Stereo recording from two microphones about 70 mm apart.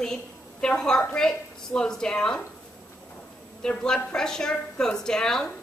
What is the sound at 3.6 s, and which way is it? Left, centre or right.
A woman's voice, centre.